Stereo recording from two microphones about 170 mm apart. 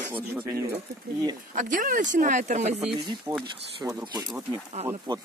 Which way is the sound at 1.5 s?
50° right (ahead or behind).